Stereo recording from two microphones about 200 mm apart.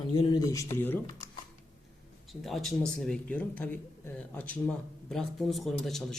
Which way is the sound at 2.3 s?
Centre (ahead or behind).